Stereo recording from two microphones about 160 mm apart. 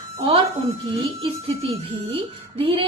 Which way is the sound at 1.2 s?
35° right (ahead or behind).